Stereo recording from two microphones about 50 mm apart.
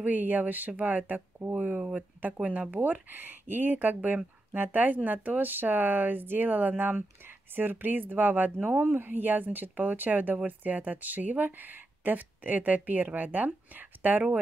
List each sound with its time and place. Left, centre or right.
0.0 s speech: right